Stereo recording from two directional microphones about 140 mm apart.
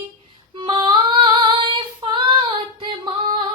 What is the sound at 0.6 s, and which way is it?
Female singing, 35° right (ahead or behind).